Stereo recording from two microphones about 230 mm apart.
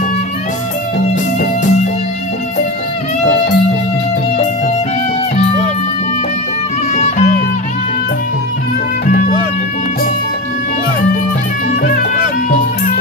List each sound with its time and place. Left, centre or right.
1.0 s music: left
7.0 s music: left
11.8 s music: left